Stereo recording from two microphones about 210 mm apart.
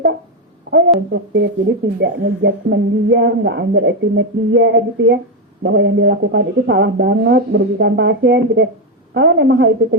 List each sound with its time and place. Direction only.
0.7 s speech: 60° right (ahead or behind)